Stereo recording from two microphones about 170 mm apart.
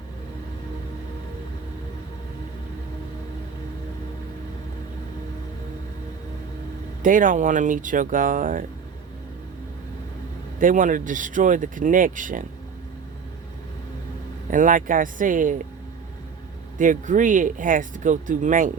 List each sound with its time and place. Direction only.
7.0 s speech: 50° right (ahead or behind)
10.6 s speech: 50° right (ahead or behind)
14.5 s speech: 50° right (ahead or behind)
16.7 s speech: 50° right (ahead or behind)